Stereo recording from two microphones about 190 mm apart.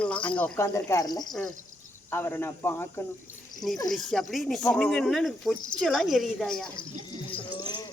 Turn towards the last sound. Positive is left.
turn(degrees=25)  # may be behind; listen again after turning